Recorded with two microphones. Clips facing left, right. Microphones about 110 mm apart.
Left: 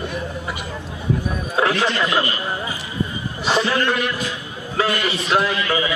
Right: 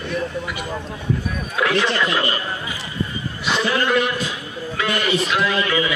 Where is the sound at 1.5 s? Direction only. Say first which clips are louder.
Left 1 dB; 30° left (ahead or behind).